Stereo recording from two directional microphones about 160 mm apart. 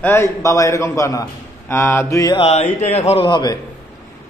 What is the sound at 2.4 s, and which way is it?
Speech, 40° left (ahead or behind).